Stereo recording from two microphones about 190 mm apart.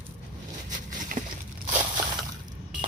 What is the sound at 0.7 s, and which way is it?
Boat, 45° right (ahead or behind).